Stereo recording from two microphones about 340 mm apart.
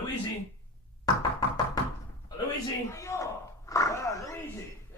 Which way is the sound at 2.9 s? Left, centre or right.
Centre.